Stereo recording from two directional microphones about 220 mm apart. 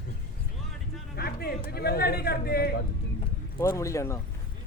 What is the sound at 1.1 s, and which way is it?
Speech, 45° left (ahead or behind).